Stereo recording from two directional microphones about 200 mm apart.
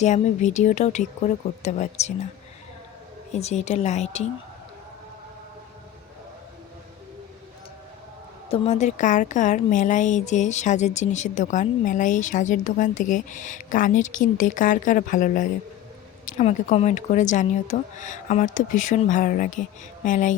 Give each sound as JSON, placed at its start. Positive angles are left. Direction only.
{"t": 0.0, "sound": "a woman's voice", "side_deg": 35}
{"t": 3.3, "sound": "a woman's voice", "side_deg": 35}
{"t": 8.4, "sound": "a woman's voice", "side_deg": 30}